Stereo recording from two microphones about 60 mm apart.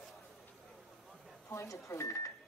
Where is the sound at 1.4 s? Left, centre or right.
Left.